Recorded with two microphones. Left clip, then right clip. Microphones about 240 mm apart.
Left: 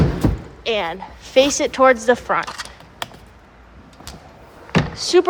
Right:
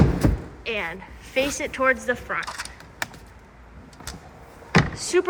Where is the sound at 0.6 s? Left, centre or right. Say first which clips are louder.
Left 7 dB; centre.